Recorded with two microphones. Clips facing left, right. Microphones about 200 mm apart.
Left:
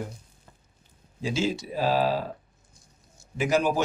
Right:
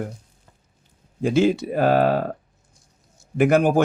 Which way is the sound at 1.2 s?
55° right (ahead or behind).